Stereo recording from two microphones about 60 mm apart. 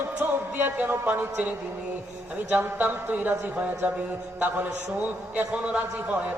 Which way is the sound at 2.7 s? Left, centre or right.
Right.